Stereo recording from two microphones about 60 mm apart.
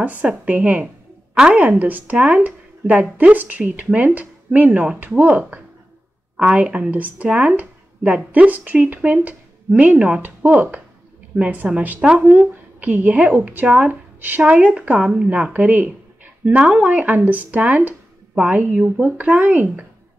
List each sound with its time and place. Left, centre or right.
0.0 s a woman's voice: right
10.2 s speech: right
14.4 s speech: centre
15.5 s speech: right
18.3 s speech: centre